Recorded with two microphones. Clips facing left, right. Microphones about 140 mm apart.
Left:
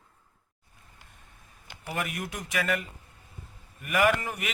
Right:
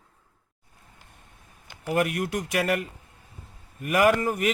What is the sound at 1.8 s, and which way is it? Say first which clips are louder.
Speech: right 8 dB; 45° right (ahead or behind).